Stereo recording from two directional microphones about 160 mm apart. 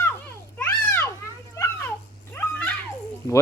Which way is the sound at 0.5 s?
10° left (ahead or behind).